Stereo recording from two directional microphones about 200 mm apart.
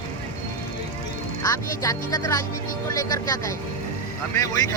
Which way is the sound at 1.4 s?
15° left (ahead or behind).